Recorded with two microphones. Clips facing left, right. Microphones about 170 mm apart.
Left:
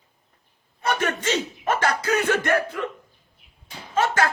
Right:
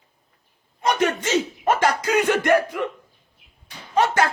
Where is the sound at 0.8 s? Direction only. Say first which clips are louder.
Right 3 dB; 15° right (ahead or behind).